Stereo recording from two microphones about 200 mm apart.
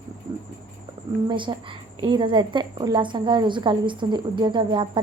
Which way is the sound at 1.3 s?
25° right (ahead or behind).